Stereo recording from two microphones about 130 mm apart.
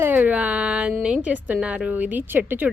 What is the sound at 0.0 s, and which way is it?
A woman's voice, 15° right (ahead or behind).